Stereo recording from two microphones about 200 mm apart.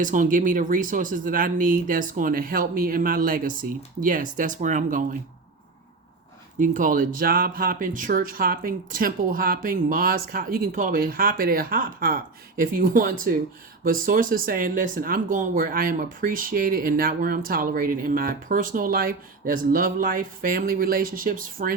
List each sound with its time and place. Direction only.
0.0 s speech: 40° right (ahead or behind)
6.6 s speech: 40° right (ahead or behind)